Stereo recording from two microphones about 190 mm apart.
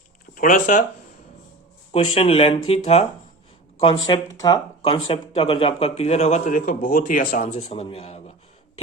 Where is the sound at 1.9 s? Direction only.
30° left (ahead or behind).